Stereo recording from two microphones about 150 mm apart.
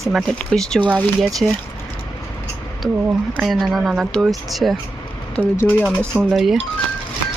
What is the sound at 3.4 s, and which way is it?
Speech, centre (ahead or behind).